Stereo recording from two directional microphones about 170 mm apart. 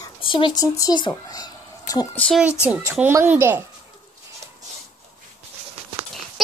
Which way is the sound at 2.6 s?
10° right (ahead or behind).